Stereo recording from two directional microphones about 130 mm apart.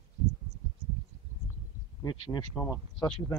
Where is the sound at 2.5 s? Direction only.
20° left (ahead or behind).